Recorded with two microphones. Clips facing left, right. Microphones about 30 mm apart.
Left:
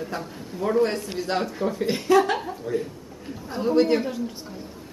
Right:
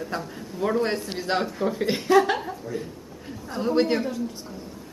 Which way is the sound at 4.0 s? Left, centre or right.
Centre.